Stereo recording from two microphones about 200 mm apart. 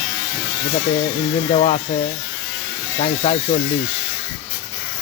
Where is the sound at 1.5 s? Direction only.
40° left (ahead or behind).